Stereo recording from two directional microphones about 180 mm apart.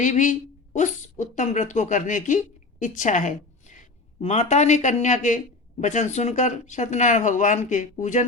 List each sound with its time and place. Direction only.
0.0 s a woman's voice: 45° left (ahead or behind)